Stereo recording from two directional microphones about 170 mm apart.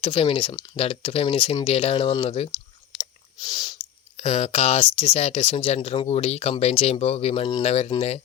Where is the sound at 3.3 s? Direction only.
25° left (ahead or behind).